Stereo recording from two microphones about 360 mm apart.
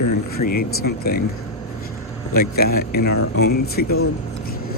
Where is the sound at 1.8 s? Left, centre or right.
Left.